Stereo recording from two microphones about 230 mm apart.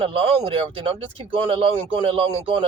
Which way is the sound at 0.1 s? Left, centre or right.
Right.